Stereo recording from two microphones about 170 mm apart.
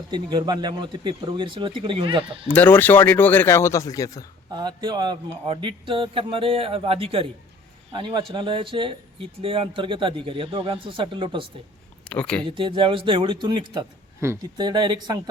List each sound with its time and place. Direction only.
0.1 s speech: 25° right (ahead or behind)
2.5 s speech: 10° left (ahead or behind)
4.5 s speech: 25° right (ahead or behind)
12.0 s speech: 5° left (ahead or behind)
12.5 s speech: 30° right (ahead or behind)